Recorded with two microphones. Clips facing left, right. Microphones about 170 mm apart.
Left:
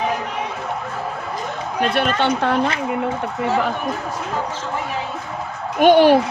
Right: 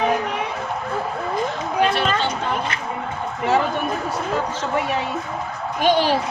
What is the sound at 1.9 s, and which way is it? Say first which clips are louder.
Speech: left 3 dB; 60° left (ahead or behind).